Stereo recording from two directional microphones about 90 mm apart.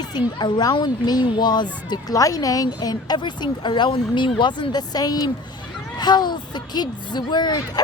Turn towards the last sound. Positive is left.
turn(degrees=50)  # may be behind; listen again after turning